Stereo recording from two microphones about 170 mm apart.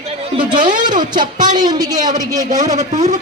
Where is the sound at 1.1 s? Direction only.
25° right (ahead or behind).